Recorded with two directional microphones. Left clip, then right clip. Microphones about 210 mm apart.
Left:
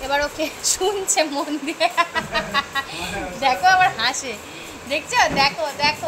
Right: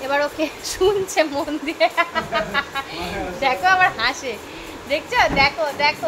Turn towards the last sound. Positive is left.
turn(degrees=-5)  # may be behind; listen again after turning